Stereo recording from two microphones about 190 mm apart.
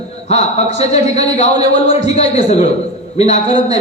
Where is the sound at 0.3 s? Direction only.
35° left (ahead or behind).